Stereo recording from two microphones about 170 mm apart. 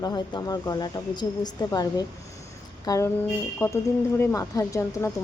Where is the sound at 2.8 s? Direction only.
20° left (ahead or behind).